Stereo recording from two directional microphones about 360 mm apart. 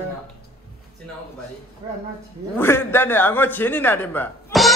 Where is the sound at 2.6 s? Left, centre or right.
Centre.